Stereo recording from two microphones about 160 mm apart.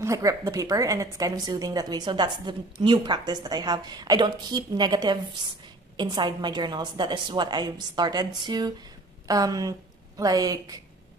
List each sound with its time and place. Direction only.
0.0 s a woman's voice: 20° right (ahead or behind)